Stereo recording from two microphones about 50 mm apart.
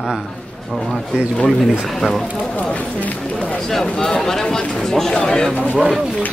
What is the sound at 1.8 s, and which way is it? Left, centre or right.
Speech, centre.